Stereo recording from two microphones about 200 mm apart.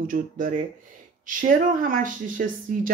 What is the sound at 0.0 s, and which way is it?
Speech, 40° right (ahead or behind).